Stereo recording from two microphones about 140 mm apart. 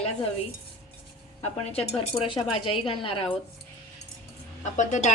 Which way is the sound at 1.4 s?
40° left (ahead or behind).